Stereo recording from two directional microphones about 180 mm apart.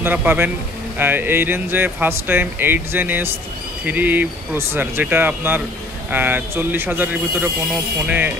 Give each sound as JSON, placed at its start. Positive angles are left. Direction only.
{"t": 0.0, "sound": "speech", "side_deg": -10}